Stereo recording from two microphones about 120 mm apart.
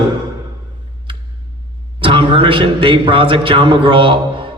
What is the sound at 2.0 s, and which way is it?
Speech, 45° right (ahead or behind).